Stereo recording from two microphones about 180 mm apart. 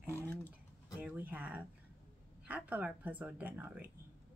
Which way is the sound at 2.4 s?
10° right (ahead or behind).